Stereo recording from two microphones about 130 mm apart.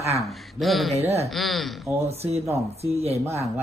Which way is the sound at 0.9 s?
55° right (ahead or behind).